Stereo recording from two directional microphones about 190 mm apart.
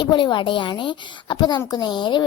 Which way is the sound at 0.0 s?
25° left (ahead or behind).